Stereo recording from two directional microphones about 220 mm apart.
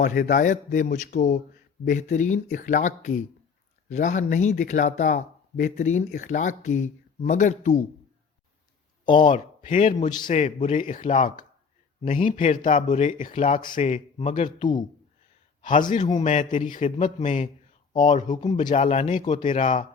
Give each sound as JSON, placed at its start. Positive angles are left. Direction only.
{"t": 0.0, "sound": "speech", "side_deg": 35}
{"t": 9.2, "sound": "speech", "side_deg": 35}
{"t": 16.1, "sound": "speech", "side_deg": 35}